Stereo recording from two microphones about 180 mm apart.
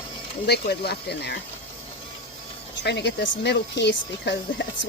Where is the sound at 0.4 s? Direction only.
65° left (ahead or behind).